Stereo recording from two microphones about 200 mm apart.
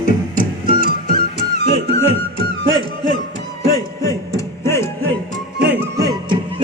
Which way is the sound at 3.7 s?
15° left (ahead or behind).